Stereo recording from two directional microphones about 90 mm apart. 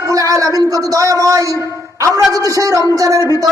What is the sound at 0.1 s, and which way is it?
A woman's voice, 40° right (ahead or behind).